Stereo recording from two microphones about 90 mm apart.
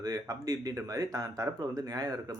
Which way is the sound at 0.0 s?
45° right (ahead or behind).